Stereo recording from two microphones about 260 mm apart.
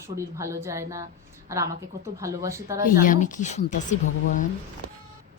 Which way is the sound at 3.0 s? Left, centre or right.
Left.